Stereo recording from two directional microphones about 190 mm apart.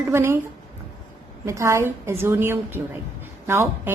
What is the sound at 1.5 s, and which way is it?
Speech, 15° right (ahead or behind).